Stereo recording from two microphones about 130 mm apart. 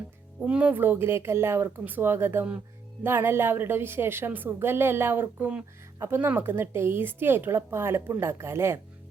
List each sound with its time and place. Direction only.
0.4 s a woman's voice: 10° right (ahead or behind)